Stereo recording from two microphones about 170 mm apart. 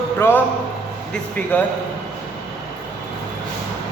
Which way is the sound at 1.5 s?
10° left (ahead or behind).